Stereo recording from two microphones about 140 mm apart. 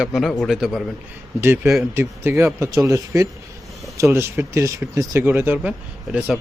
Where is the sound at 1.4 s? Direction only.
20° right (ahead or behind).